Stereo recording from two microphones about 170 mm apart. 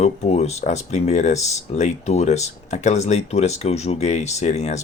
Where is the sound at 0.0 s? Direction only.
40° left (ahead or behind).